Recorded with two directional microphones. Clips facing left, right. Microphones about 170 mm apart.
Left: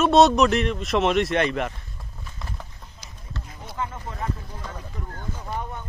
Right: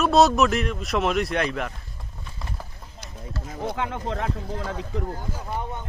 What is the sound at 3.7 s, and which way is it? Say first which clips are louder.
Speech: even; 85° right.